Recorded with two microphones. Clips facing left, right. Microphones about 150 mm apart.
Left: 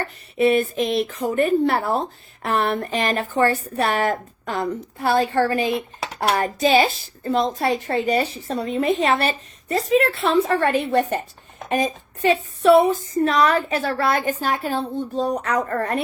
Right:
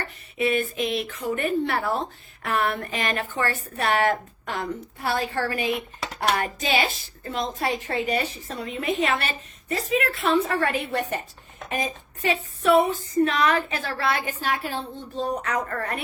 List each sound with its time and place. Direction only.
0.3 s speech: 35° left (ahead or behind)